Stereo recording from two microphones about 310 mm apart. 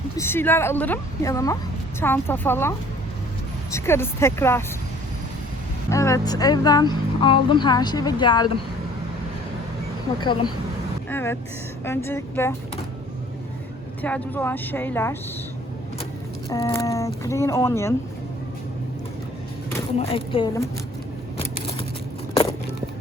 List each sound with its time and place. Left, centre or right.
0.2 s speech: centre
5.9 s speech: centre
10.1 s speech: centre
11.1 s speech: centre
14.0 s speech: centre
16.5 s speech: centre
20.0 s speech: centre
21.3 s a sound: centre